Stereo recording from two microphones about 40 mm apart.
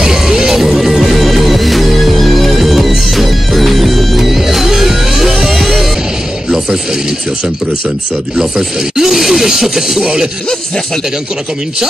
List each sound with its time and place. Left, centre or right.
0.0 s music: centre
8.4 s speech: centre